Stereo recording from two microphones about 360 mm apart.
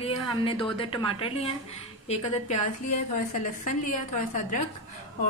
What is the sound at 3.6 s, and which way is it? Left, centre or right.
Speech, left.